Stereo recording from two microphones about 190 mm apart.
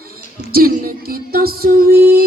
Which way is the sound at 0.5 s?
50° right (ahead or behind).